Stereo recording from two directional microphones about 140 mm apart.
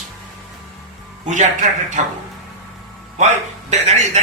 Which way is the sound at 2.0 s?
60° right (ahead or behind).